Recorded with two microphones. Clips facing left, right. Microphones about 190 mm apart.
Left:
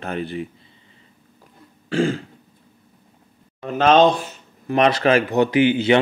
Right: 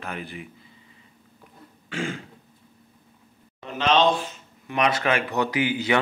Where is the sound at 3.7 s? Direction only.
50° left (ahead or behind).